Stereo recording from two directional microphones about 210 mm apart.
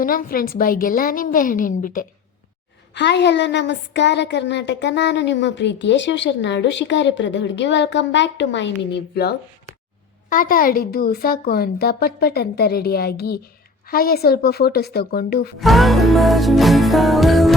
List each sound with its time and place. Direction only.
0.0 s a woman's voice: 40° left (ahead or behind)
2.9 s a woman's voice: 55° left (ahead or behind)
10.2 s a woman's voice: 40° left (ahead or behind)
15.5 s music: centre (ahead or behind)